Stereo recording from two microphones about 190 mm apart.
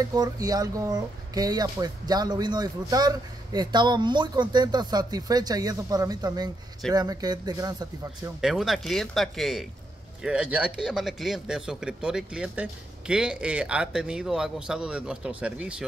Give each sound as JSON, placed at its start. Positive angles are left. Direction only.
{"t": 0.0, "sound": "speech", "side_deg": -20}
{"t": 8.4, "sound": "a man's voice", "side_deg": 0}